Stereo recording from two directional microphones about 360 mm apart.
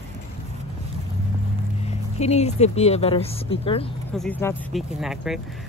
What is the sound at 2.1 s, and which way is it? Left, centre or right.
Speech, centre.